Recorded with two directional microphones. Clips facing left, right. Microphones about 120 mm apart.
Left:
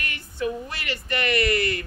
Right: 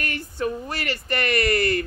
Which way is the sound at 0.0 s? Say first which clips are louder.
Right 2 dB; 40° right (ahead or behind).